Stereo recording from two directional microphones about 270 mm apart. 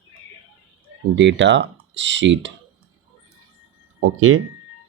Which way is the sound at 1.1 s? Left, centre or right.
Right.